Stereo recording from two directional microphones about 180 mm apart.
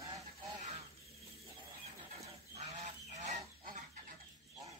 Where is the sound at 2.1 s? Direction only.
35° right (ahead or behind).